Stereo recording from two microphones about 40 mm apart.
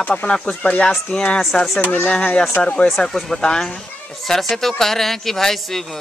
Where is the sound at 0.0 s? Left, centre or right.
Left.